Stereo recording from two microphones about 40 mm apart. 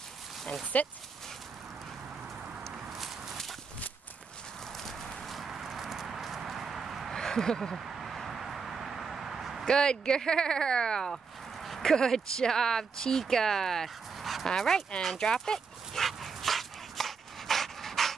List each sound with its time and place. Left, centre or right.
0.7 s speech: left
3.0 s walk: centre
4.7 s clip-clop: centre
7.1 s a sound: centre
7.7 s a sound: centre
9.7 s speech: centre
11.6 s speech: centre
16.0 s dog: centre